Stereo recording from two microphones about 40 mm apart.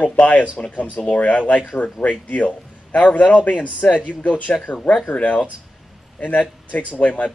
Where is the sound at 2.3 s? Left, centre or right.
Left.